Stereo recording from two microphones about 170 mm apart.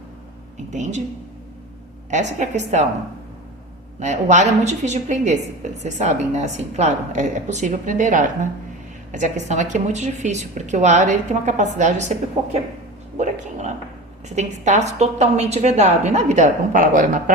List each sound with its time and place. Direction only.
0.7 s a woman's voice: 45° right (ahead or behind)
2.0 s a woman's voice: 45° right (ahead or behind)
4.0 s a woman's voice: 45° right (ahead or behind)
13.1 s a sound: 45° right (ahead or behind)
14.3 s a woman's voice: 45° right (ahead or behind)